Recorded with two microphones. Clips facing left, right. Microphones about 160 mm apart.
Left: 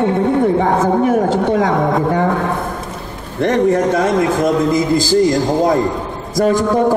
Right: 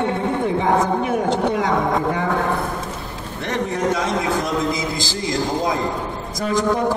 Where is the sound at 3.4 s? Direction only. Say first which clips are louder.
Left 9 dB; 50° left (ahead or behind).